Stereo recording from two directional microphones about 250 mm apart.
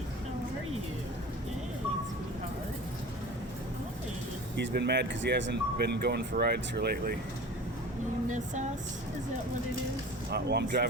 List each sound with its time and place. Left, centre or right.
4.5 s speech: right
10.3 s speech: right